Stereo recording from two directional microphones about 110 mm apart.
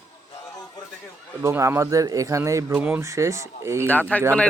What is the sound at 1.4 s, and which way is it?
Speech, 25° right (ahead or behind).